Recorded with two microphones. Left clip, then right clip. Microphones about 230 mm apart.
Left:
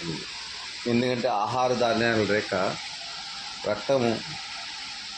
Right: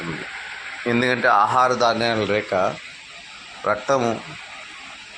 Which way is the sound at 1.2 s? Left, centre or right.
Centre.